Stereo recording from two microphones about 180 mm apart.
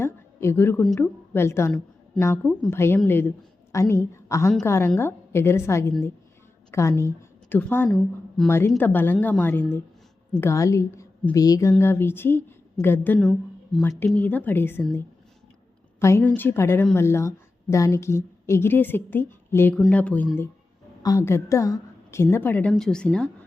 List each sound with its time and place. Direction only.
0.0 s a sound: 15° left (ahead or behind)
0.9 s a woman's voice: 10° left (ahead or behind)
7.9 s speech: centre (ahead or behind)
8.4 s a woman's voice: 15° left (ahead or behind)
13.7 s a woman's voice: centre (ahead or behind)
16.0 s a woman's voice: 15° left (ahead or behind)